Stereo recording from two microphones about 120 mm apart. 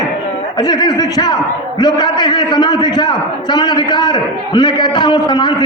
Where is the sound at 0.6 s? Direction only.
35° left (ahead or behind).